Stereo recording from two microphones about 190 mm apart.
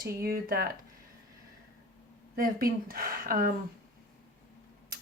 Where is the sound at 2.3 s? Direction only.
50° right (ahead or behind).